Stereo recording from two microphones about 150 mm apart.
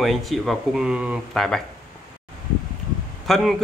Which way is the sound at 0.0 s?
Centre (ahead or behind).